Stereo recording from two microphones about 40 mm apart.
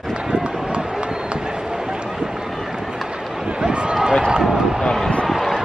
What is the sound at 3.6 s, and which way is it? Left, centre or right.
Run, right.